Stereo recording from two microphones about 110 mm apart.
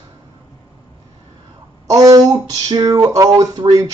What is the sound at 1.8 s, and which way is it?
Speech, 30° right (ahead or behind).